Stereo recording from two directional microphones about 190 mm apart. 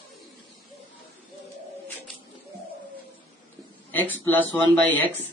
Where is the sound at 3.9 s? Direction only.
10° left (ahead or behind).